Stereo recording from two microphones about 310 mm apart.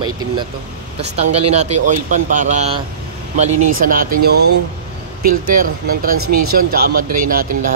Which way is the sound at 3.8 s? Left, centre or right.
Right.